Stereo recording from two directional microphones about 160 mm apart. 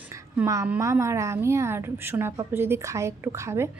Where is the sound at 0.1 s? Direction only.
20° right (ahead or behind).